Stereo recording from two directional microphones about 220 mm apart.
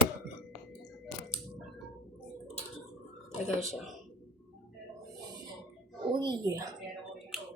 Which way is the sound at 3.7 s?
Centre (ahead or behind).